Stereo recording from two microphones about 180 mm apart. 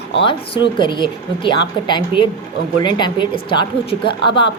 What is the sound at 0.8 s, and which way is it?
A woman's voice, 25° left (ahead or behind).